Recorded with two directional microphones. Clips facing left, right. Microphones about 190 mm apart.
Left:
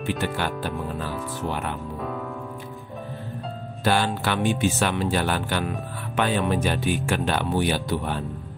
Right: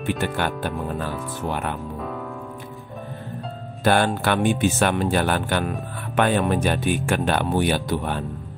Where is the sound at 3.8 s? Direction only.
55° right (ahead or behind).